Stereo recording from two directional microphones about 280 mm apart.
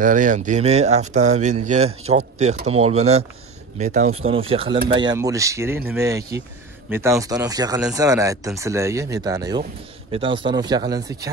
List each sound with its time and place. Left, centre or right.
0.0 s speech: right